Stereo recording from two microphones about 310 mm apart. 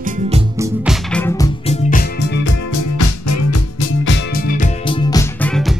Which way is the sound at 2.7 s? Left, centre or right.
Left.